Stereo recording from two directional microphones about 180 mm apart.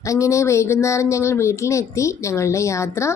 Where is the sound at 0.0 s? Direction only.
15° left (ahead or behind).